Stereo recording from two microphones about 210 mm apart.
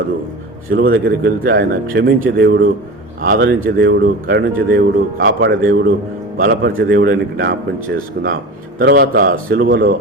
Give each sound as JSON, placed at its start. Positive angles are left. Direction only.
{"t": 0.7, "sound": "speech", "side_deg": -45}
{"t": 5.1, "sound": "speech", "side_deg": -60}